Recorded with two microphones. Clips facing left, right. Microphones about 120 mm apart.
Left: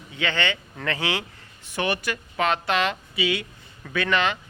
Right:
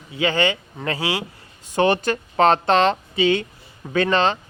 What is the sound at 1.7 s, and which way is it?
Speech, 50° right (ahead or behind).